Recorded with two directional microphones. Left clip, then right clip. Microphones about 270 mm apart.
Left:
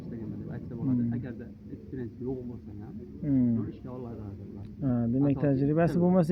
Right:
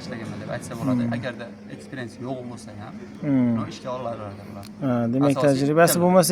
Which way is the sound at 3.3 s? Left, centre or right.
Centre.